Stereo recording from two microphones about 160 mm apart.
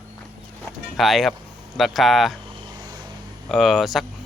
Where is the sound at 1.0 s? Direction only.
Centre (ahead or behind).